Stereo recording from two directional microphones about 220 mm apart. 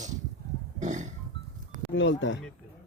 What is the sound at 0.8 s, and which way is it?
Music, 35° right (ahead or behind).